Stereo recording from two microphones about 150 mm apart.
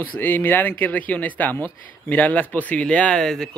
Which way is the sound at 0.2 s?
15° left (ahead or behind).